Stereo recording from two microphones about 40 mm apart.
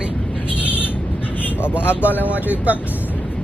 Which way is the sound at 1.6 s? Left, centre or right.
Left.